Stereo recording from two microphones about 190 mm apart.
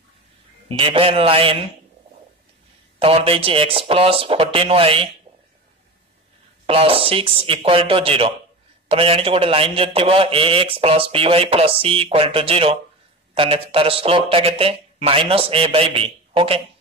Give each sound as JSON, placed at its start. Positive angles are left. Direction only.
{"t": 0.7, "sound": "a man's voice", "side_deg": -30}
{"t": 3.0, "sound": "a man's voice", "side_deg": -30}
{"t": 6.6, "sound": "a man's voice", "side_deg": -30}